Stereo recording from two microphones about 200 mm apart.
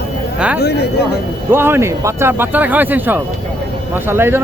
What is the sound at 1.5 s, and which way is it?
Speech, 10° right (ahead or behind).